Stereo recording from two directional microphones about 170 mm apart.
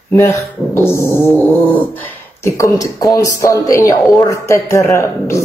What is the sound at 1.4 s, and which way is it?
Speech, 10° left (ahead or behind).